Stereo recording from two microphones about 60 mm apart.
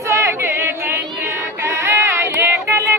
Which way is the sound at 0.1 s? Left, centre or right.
Right.